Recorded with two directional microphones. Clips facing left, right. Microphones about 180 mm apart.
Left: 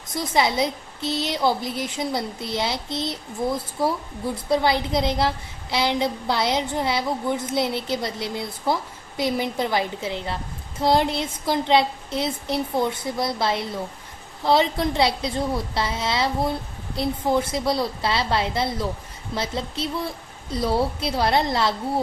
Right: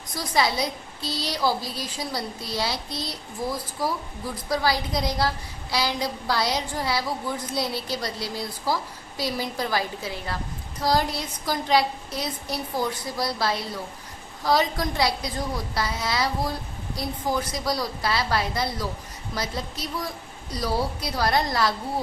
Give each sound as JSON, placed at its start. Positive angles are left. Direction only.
{"t": 0.1, "sound": "a woman's voice", "side_deg": 25}